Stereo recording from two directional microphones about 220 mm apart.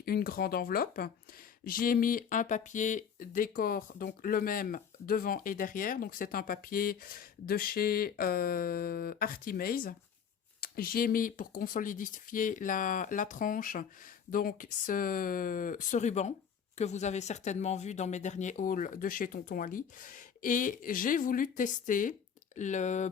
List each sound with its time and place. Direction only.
0.0 s speech: 45° left (ahead or behind)